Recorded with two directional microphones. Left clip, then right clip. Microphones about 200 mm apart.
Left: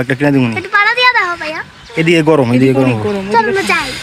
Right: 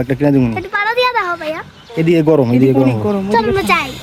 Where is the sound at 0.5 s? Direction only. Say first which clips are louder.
Left 4 dB; 45° right (ahead or behind).